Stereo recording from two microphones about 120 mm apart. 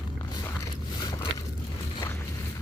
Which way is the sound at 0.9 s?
35° left (ahead or behind).